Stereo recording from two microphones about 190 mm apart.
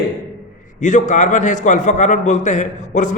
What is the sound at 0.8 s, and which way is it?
A man's voice, 40° left (ahead or behind).